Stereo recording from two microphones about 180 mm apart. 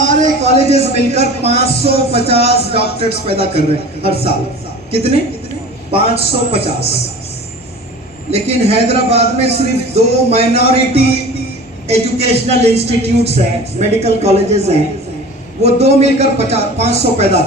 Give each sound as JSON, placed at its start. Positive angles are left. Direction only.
{"t": 0.0, "sound": "a sound", "side_deg": -40}
{"t": 0.6, "sound": "a man's voice", "side_deg": -40}
{"t": 5.9, "sound": "a man's voice", "side_deg": -35}
{"t": 8.3, "sound": "a man's voice", "side_deg": -35}